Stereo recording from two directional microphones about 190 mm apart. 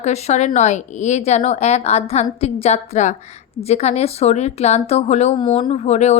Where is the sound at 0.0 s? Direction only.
35° left (ahead or behind).